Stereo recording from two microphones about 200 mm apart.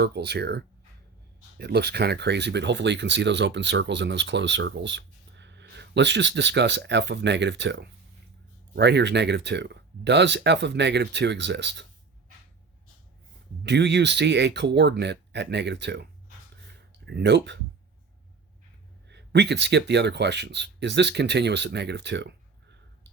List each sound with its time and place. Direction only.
0.0 s speech: 55° right (ahead or behind)
13.7 s speech: 60° right (ahead or behind)
16.6 s a sound: 60° right (ahead or behind)
19.0 s speech: 60° right (ahead or behind)